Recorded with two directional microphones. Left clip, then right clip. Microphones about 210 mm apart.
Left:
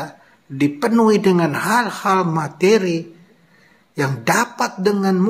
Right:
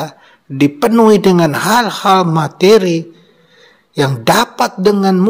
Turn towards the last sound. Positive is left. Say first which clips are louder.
# right 6 dB
turn(degrees=-35)  # may be behind; listen again after turning